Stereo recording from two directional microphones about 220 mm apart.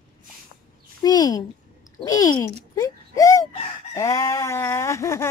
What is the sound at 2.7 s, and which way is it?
Baby cry, 15° left (ahead or behind).